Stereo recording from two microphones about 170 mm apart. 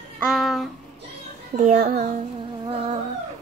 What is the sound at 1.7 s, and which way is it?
Speech, 55° right (ahead or behind).